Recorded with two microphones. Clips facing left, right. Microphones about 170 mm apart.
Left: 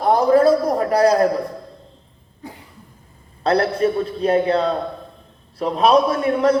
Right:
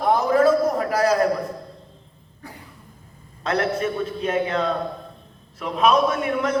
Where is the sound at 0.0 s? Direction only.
35° left (ahead or behind).